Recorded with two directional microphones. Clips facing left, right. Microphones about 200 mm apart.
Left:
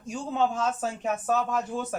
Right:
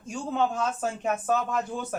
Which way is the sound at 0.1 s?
Centre (ahead or behind).